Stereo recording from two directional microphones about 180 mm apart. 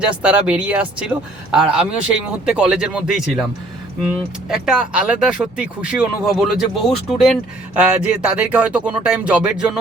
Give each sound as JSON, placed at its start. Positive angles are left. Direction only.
{"t": 0.0, "sound": "speech", "side_deg": -5}
{"t": 4.4, "sound": "speech", "side_deg": -5}